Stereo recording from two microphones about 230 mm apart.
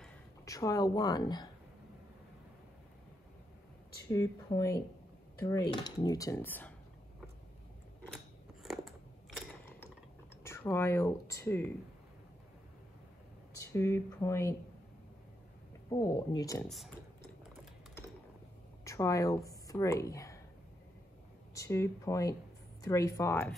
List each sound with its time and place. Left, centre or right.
0.5 s cutlery: centre
4.1 s cutlery: centre
10.4 s speech: centre
13.7 s cutlery: centre
15.9 s cutlery: centre
16.6 s speech: centre
18.9 s speech: centre
21.5 s cutlery: centre